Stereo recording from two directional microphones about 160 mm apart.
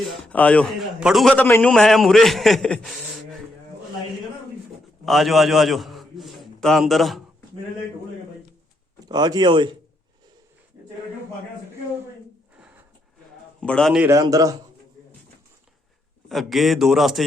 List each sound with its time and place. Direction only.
0.0 s a man's voice: 5° left (ahead or behind)
5.0 s a man's voice: centre (ahead or behind)
9.0 s speech: 25° right (ahead or behind)
12.5 s a sound: 5° right (ahead or behind)
13.6 s a man's voice: 5° left (ahead or behind)
14.1 s speech: 20° right (ahead or behind)
16.3 s a man's voice: centre (ahead or behind)